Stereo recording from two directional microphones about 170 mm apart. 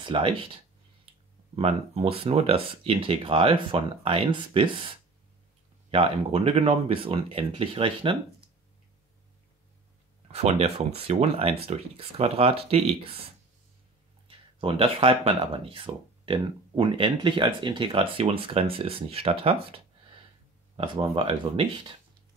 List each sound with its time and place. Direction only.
0.0 s speech: 30° right (ahead or behind)
1.6 s speech: 35° right (ahead or behind)
10.2 s speech: 40° right (ahead or behind)
14.2 s speech: 30° right (ahead or behind)
19.4 s a sound: 35° right (ahead or behind)
20.7 s speech: 30° right (ahead or behind)